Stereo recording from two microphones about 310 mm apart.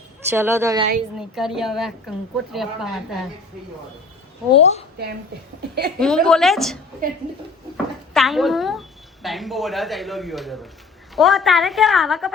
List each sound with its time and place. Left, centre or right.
0.3 s a woman's voice: centre
4.5 s a woman's voice: centre
6.0 s a woman's voice: centre
8.1 s a woman's voice: centre